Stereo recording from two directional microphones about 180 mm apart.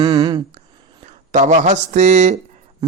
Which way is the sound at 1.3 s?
40° right (ahead or behind).